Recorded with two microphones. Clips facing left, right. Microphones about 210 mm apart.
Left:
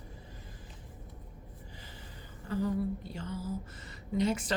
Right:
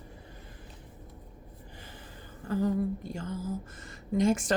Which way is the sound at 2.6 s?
45° right (ahead or behind).